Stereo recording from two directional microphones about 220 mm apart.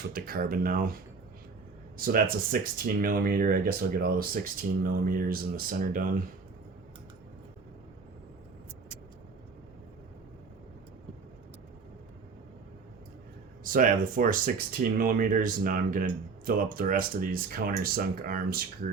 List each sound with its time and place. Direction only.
0.1 s speech: 40° right (ahead or behind)
13.7 s speech: 40° right (ahead or behind)